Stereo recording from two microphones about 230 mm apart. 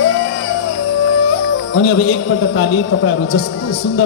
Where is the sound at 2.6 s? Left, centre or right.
Left.